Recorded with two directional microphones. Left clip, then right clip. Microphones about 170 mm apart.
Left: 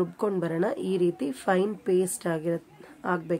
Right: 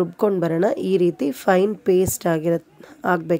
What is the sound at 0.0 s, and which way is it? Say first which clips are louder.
A woman's voice: right 8 dB; 35° right (ahead or behind).